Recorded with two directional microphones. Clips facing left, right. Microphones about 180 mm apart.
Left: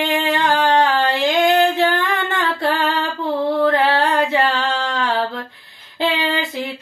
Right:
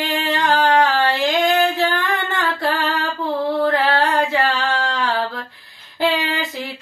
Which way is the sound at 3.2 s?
25° left (ahead or behind).